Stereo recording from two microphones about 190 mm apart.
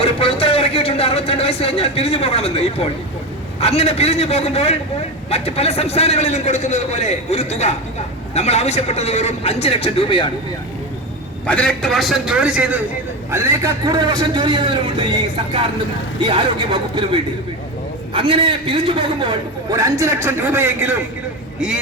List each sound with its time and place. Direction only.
0.0 s a sound: 30° left (ahead or behind)
3.6 s a man's voice: 30° left (ahead or behind)
11.4 s a man's voice: 5° left (ahead or behind); by 15.0 s 25° right (ahead or behind)
16.2 s a man's voice: 25° right (ahead or behind); by 21.0 s 10° right (ahead or behind)